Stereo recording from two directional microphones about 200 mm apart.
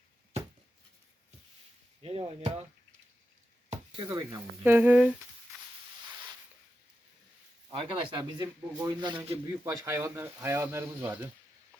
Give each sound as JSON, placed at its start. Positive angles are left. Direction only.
{"t": 2.0, "sound": "speech", "side_deg": -30}
{"t": 3.9, "sound": "speech", "side_deg": -20}
{"t": 7.7, "sound": "speech", "side_deg": -25}